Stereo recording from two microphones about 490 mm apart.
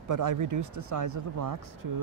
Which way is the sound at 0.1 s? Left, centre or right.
Right.